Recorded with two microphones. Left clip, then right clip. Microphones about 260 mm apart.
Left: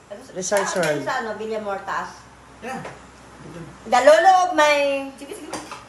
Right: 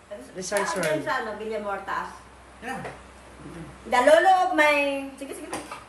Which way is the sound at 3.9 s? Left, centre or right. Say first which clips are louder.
Left 4 dB; left.